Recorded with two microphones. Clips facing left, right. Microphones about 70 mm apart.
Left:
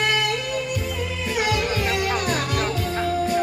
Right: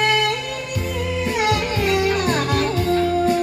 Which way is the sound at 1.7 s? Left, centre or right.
Right.